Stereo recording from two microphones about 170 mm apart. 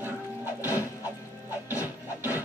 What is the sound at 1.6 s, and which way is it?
Music, 10° right (ahead or behind).